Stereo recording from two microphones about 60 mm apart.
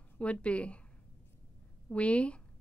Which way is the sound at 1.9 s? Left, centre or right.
Left.